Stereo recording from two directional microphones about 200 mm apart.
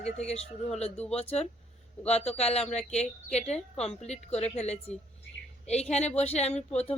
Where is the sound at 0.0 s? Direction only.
30° left (ahead or behind).